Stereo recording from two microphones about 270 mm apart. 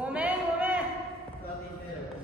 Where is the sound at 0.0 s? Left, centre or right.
Centre.